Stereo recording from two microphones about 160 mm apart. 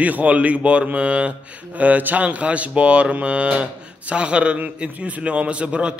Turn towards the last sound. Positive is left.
turn(degrees=-5)  # may be behind; listen again after turning